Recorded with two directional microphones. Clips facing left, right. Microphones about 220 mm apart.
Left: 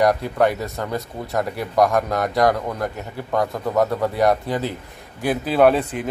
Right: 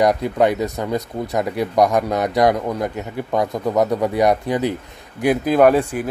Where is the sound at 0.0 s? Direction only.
20° right (ahead or behind).